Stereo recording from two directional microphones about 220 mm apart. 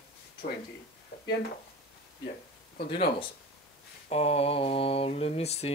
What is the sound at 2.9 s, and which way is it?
Speech, 25° left (ahead or behind).